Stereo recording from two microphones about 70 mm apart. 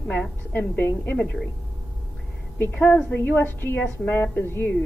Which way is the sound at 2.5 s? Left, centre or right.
Left.